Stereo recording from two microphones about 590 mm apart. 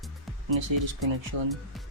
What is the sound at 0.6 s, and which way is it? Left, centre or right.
Speech, right.